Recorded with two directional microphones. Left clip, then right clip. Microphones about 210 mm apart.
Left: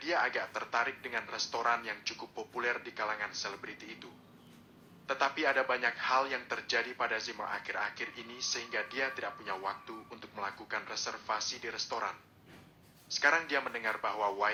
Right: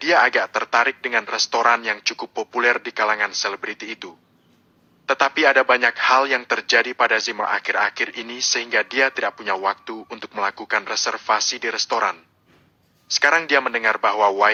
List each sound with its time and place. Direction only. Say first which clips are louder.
0.0 s a man's voice: right 16 dB; 45° right (ahead or behind)